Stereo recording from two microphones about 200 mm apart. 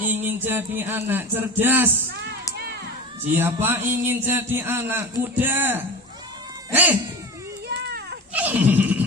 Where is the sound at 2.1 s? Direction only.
60° right (ahead or behind).